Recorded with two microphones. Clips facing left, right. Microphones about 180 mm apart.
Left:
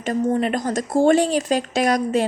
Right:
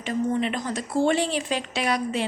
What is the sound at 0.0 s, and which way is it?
A woman's voice, 45° left (ahead or behind).